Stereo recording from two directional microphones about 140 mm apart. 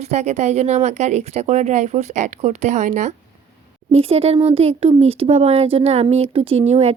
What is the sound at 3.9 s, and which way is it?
Speech, 45° right (ahead or behind).